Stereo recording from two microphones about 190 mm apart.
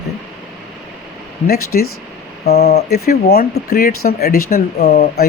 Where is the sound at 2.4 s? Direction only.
60° left (ahead or behind).